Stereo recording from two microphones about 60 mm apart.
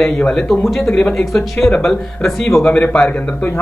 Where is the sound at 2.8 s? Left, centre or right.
Centre.